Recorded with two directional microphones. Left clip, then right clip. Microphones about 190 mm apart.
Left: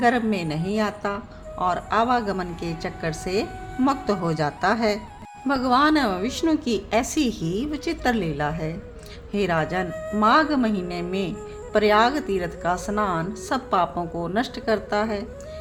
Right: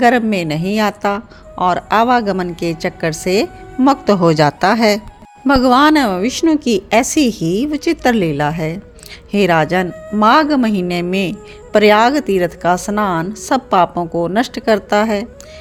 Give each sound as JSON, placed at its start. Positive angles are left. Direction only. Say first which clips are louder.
{"t": 0.0, "sound": "a woman's voice", "louder": "right 9 dB", "side_deg": -45}
{"t": 9.9, "sound": "speech", "louder": "right 2 dB", "side_deg": 0}
{"t": 10.2, "sound": "a woman's voice", "louder": "right 8 dB", "side_deg": -40}